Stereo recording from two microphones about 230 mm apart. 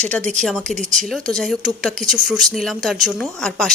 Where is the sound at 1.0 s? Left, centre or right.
Centre.